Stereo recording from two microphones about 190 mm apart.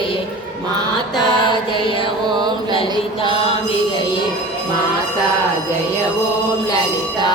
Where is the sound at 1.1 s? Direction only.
25° left (ahead or behind).